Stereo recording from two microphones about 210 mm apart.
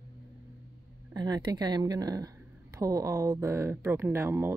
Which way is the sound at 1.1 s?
20° right (ahead or behind).